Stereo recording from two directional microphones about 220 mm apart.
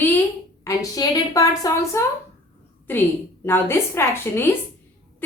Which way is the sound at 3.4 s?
10° left (ahead or behind).